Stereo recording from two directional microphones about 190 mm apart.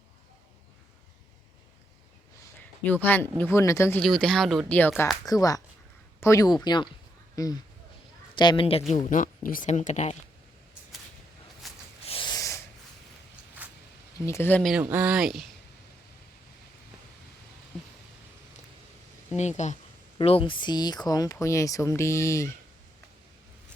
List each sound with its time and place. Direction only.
2.6 s speech: 10° left (ahead or behind)
4.0 s speech: 5° left (ahead or behind)
5.2 s speech: 20° left (ahead or behind)
9.0 s speech: 45° left (ahead or behind)
11.6 s zipper: centre (ahead or behind)
12.0 s a sound: 25° left (ahead or behind)
14.3 s speech: 10° left (ahead or behind)
14.8 s speech: 10° right (ahead or behind)
19.4 s speech: 35° left (ahead or behind); by 22.5 s 15° left (ahead or behind)